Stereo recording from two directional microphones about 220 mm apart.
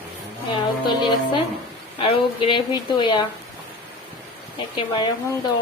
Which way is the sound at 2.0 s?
25° left (ahead or behind).